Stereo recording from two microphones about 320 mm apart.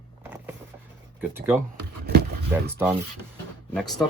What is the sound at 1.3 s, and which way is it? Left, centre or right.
Speech, centre.